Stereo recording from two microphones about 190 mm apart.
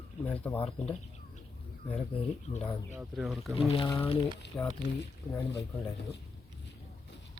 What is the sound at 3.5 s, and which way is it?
Speech, 30° left (ahead or behind).